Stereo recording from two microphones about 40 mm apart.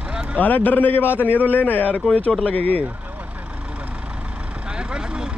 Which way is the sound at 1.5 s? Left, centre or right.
Left.